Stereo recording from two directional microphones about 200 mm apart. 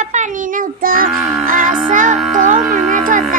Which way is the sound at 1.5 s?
40° right (ahead or behind).